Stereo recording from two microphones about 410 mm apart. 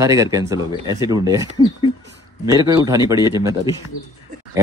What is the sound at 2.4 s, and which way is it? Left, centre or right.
Speech, centre.